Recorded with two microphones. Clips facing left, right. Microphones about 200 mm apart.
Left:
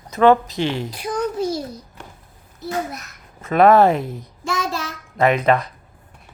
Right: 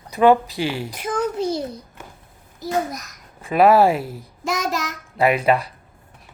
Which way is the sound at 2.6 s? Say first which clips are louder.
Right 2 dB; 35° right (ahead or behind).